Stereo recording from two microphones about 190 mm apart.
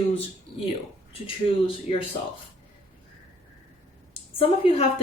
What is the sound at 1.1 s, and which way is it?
Speech, 25° left (ahead or behind).